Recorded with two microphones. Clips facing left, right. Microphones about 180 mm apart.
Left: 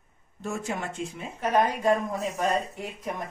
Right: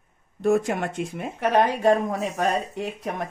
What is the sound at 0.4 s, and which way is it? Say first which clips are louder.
A woman's voice: right 10 dB; 60° right (ahead or behind).